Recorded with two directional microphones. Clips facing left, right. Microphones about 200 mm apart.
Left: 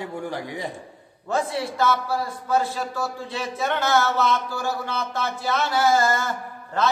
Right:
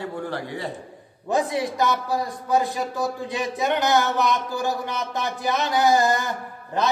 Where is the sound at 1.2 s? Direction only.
15° right (ahead or behind).